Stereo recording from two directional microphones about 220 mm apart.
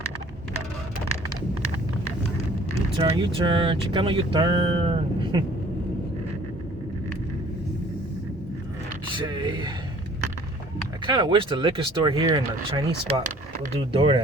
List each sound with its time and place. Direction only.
3.0 s speech: 20° right (ahead or behind)
9.1 s speech: 20° right (ahead or behind)
11.0 s speech: 20° right (ahead or behind)